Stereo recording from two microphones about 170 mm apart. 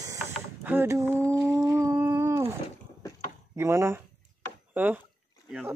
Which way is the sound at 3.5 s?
15° right (ahead or behind).